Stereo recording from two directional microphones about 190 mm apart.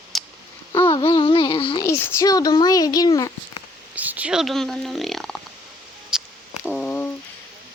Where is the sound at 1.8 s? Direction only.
15° left (ahead or behind).